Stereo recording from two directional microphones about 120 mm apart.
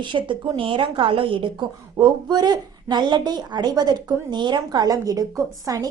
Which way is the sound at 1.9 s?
35° right (ahead or behind).